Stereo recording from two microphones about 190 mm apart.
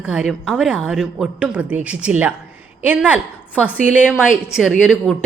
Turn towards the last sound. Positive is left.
turn(degrees=-5)  # may be behind; listen again after turning